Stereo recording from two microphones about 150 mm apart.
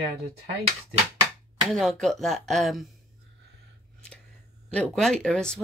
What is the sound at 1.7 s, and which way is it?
Speech, centre (ahead or behind).